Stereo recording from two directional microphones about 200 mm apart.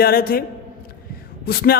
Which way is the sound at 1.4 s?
50° left (ahead or behind).